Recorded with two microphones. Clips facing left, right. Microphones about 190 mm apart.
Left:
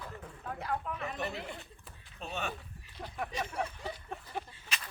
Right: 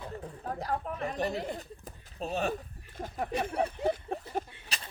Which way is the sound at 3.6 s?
50° right (ahead or behind).